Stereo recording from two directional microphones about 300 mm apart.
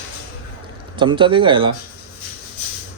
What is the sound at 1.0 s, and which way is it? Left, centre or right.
Speech, centre.